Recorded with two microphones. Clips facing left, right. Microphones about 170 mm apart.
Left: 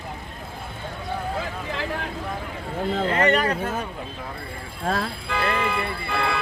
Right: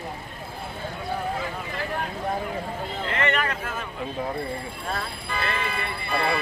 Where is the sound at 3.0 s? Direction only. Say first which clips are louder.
Left 4 dB; 40° left (ahead or behind).